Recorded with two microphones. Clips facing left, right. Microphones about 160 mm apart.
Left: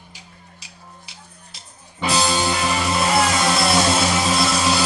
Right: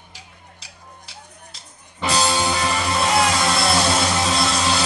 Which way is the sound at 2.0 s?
Centre (ahead or behind).